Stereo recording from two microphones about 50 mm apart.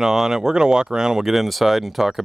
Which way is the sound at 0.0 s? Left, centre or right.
Centre.